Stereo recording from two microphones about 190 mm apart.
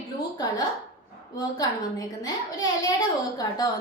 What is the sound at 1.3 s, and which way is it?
A woman's voice, 20° left (ahead or behind).